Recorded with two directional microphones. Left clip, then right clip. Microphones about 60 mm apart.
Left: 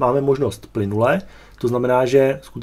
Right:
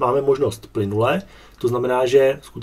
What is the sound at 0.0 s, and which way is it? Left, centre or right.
Speech, centre.